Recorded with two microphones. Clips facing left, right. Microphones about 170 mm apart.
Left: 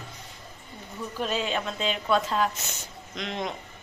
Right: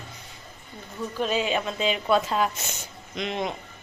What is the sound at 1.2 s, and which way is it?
A woman's voice, 5° right (ahead or behind).